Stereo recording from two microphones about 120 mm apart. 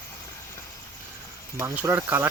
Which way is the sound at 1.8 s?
15° right (ahead or behind).